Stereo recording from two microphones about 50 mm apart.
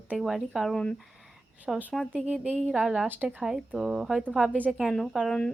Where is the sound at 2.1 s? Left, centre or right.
Right.